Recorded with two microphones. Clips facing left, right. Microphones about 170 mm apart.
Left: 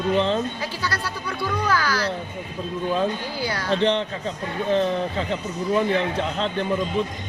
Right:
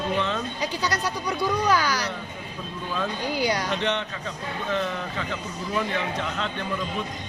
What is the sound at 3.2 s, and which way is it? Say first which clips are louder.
Speech: right 3 dB; 15° right (ahead or behind).